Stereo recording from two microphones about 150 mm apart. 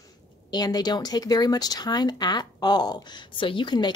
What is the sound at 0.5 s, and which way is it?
Speech, 25° left (ahead or behind).